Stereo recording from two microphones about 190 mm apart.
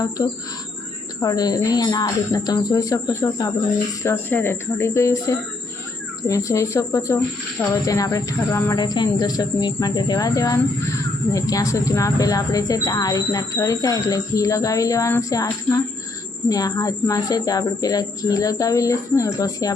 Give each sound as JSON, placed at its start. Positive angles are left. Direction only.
{"t": 0.2, "sound": "speech", "side_deg": 15}
{"t": 6.2, "sound": "speech", "side_deg": 15}